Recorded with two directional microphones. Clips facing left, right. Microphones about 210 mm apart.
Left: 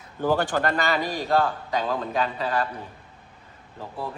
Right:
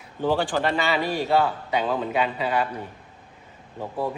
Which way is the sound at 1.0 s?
40° left (ahead or behind).